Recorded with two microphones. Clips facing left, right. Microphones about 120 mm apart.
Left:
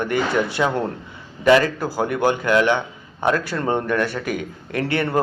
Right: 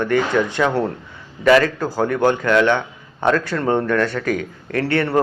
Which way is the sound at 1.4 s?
25° left (ahead or behind).